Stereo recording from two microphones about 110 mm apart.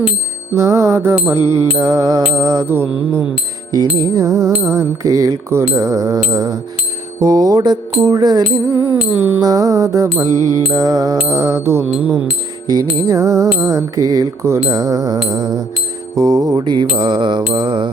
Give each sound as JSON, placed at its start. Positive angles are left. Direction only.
{"t": 0.5, "sound": "music", "side_deg": -25}
{"t": 3.7, "sound": "music", "side_deg": -35}
{"t": 9.1, "sound": "music", "side_deg": -15}
{"t": 9.4, "sound": "music", "side_deg": -35}
{"t": 11.9, "sound": "music", "side_deg": -10}
{"t": 13.1, "sound": "music", "side_deg": -30}
{"t": 16.1, "sound": "mantra", "side_deg": -35}